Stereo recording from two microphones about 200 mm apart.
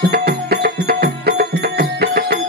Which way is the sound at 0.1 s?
50° right (ahead or behind).